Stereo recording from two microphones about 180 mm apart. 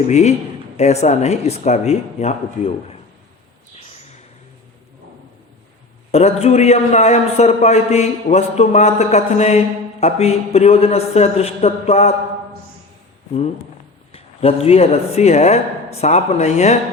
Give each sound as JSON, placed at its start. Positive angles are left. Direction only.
{"t": 0.1, "sound": "a man's voice", "side_deg": 40}
{"t": 6.1, "sound": "a man's voice", "side_deg": 35}
{"t": 14.1, "sound": "speech", "side_deg": 35}